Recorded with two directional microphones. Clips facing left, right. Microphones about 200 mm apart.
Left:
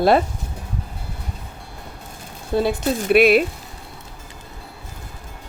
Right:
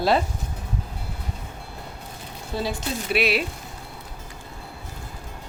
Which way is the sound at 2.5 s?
55° left (ahead or behind).